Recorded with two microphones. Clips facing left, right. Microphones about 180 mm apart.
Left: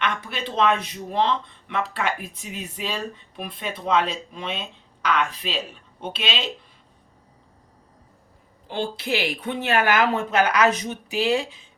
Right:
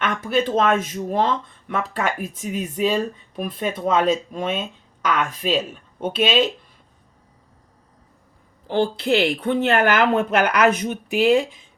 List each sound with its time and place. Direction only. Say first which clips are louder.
0.0 s speech: right 7 dB; 45° right (ahead or behind)
8.7 s speech: right 7 dB; 60° right (ahead or behind)